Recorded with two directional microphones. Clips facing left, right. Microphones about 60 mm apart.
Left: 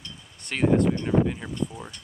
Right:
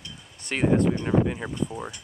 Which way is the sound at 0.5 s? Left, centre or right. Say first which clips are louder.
Even; centre.